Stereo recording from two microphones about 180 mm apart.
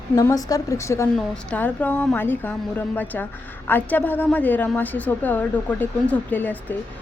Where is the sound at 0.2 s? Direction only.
20° left (ahead or behind).